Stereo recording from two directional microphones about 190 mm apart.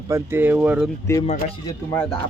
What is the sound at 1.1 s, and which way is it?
Speech, 15° left (ahead or behind).